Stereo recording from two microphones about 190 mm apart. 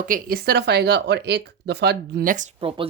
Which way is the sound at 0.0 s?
50° right (ahead or behind).